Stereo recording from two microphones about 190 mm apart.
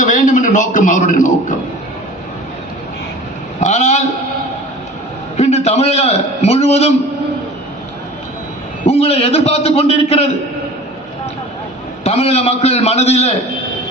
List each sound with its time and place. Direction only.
0.0 s a man's voice: 40° left (ahead or behind)
3.6 s a man's voice: 35° left (ahead or behind)
5.4 s a man's voice: 35° left (ahead or behind)
8.9 s a man's voice: 30° left (ahead or behind)
12.0 s a man's voice: 35° left (ahead or behind)